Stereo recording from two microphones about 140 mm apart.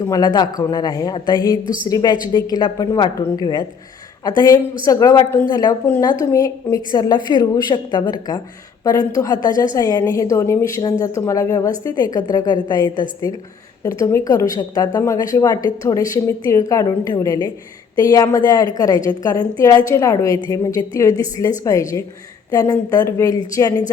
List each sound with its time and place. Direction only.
0.0 s a woman's voice: 25° left (ahead or behind)
13.8 s a woman's voice: 20° left (ahead or behind)